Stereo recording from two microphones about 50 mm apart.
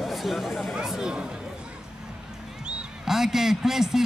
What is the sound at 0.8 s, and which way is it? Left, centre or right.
Speech, centre.